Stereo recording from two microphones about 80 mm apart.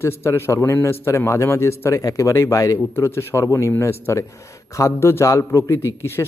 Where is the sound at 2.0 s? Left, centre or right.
Left.